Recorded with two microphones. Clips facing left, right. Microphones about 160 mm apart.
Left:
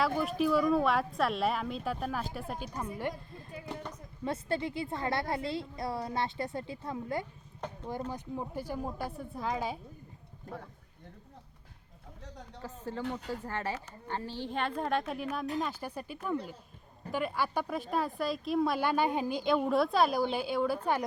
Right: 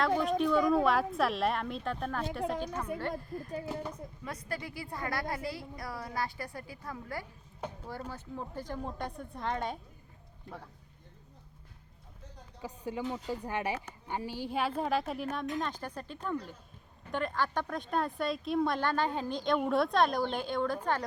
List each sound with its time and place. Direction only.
0.0 s a woman's voice: 5° left (ahead or behind)
4.2 s a woman's voice: 25° left (ahead or behind); by 9.7 s 5° left (ahead or behind)
10.5 s speech: 45° left (ahead or behind)
12.6 s a woman's voice: 15° right (ahead or behind); by 21.0 s 10° left (ahead or behind)